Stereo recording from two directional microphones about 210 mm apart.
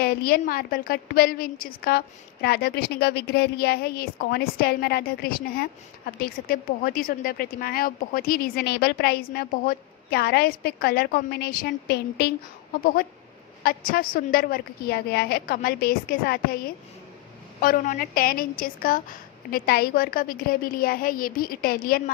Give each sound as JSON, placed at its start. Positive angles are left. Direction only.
{"t": 0.0, "sound": "speech", "side_deg": 45}
{"t": 13.7, "sound": "speech", "side_deg": 45}